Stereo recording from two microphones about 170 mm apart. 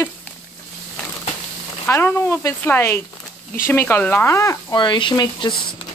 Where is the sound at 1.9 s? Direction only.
15° left (ahead or behind).